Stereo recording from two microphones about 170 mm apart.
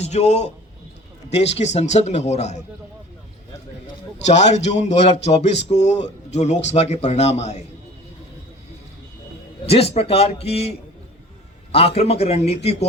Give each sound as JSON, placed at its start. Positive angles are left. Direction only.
{"t": 0.0, "sound": "a man's voice", "side_deg": 40}
{"t": 1.5, "sound": "speech", "side_deg": 40}
{"t": 4.3, "sound": "speech", "side_deg": 40}
{"t": 9.6, "sound": "speech", "side_deg": 35}